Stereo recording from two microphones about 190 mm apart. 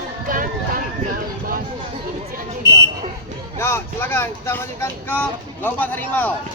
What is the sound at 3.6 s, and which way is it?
Speech, 15° left (ahead or behind).